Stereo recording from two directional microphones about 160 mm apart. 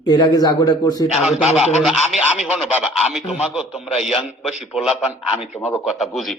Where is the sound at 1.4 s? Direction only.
45° left (ahead or behind).